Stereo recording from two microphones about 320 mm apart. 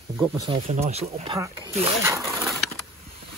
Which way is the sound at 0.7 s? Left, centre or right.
Centre.